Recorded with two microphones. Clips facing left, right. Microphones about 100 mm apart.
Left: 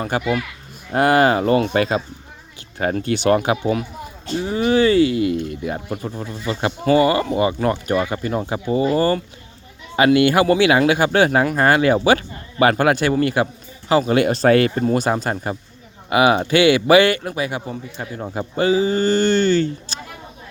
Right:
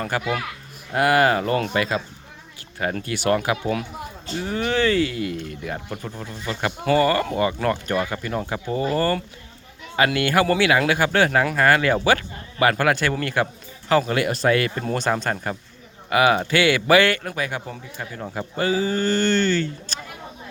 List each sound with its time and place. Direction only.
0.1 s speech: 20° left (ahead or behind)
4.4 s speech: 10° left (ahead or behind)
14.1 s speech: 25° left (ahead or behind)
14.8 s speech: 10° left (ahead or behind)